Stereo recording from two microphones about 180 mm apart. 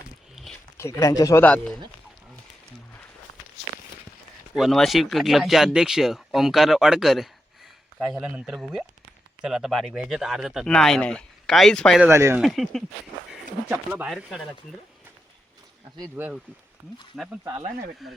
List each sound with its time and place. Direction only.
0.4 s a sound: centre (ahead or behind)
0.8 s speech: 15° left (ahead or behind)
4.5 s speech: centre (ahead or behind)
12.0 s speech: 15° right (ahead or behind)
12.4 s speech: centre (ahead or behind)
16.0 s speech: 10° right (ahead or behind)